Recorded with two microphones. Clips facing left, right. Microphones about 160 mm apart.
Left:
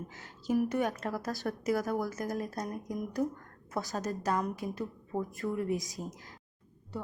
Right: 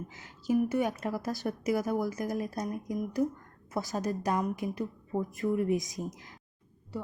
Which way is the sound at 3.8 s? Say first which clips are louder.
Right 2 dB; 15° right (ahead or behind).